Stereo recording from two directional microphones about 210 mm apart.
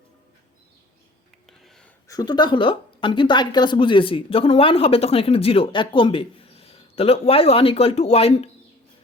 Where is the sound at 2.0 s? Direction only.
20° left (ahead or behind).